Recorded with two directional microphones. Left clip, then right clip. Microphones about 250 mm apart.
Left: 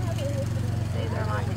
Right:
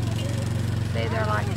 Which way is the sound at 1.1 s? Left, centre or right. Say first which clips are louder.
Right 6 dB; centre.